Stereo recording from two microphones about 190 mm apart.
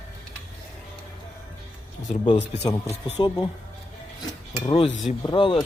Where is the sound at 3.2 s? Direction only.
25° left (ahead or behind).